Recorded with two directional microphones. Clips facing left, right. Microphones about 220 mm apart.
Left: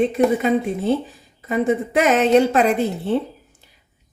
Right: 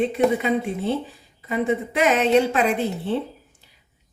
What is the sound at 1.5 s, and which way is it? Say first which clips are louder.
A woman's voice: left 3 dB; 45° left (ahead or behind).